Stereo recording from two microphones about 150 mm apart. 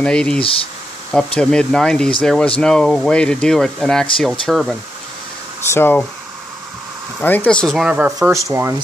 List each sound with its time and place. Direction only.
0.0 s speech: 5° left (ahead or behind)
5.7 s speech: 15° left (ahead or behind)
7.2 s speech: 10° left (ahead or behind); by 8.3 s 5° right (ahead or behind)
8.3 s speech: 20° right (ahead or behind)